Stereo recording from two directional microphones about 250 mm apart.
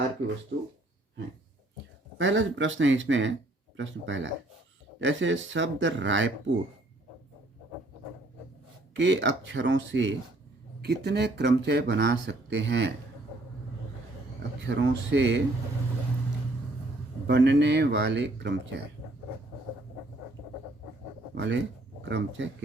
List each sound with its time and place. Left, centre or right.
0.5 s speech: right
2.1 s speech: right
8.9 s speech: right
14.7 s speech: right
17.2 s speech: right
21.3 s speech: right